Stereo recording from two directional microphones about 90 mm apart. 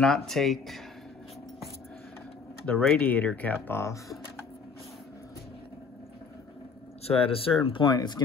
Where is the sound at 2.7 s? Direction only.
15° left (ahead or behind); by 4.4 s 30° left (ahead or behind).